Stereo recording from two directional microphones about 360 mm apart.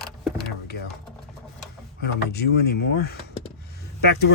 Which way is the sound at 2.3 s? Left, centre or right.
Left.